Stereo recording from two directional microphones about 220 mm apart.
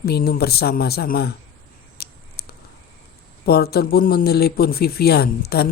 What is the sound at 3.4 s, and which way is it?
Speech, 45° left (ahead or behind).